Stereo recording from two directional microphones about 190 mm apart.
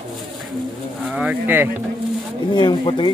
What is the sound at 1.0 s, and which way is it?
Speech, 5° right (ahead or behind).